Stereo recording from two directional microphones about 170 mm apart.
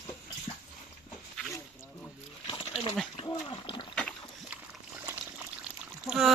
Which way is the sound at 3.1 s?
25° left (ahead or behind).